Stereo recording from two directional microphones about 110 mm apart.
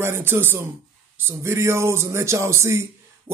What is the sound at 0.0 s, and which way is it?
Speech, 20° right (ahead or behind).